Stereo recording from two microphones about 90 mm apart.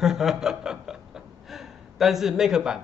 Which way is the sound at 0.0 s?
5° right (ahead or behind).